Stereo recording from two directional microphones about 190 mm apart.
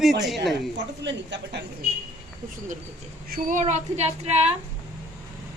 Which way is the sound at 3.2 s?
45° right (ahead or behind).